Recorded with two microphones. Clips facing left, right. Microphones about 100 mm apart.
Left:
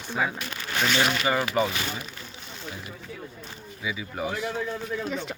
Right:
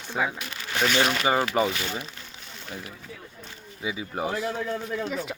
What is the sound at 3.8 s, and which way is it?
Speech, 30° right (ahead or behind).